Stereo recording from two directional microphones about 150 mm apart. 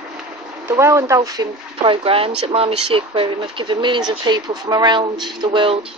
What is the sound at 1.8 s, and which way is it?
Speech, 40° right (ahead or behind).